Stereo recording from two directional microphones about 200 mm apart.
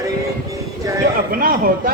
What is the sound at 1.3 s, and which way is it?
Speech, 45° right (ahead or behind).